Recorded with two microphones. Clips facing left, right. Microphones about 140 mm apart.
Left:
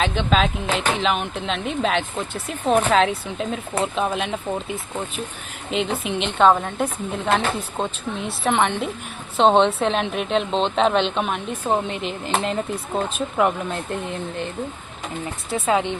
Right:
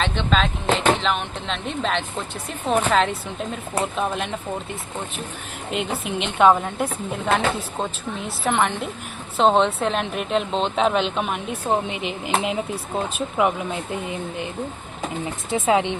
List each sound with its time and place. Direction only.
0.0 s speech: 5° left (ahead or behind); by 16.0 s 20° right (ahead or behind)